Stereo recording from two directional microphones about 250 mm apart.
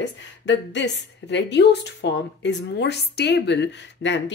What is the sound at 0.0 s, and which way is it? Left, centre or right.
A woman's voice, left.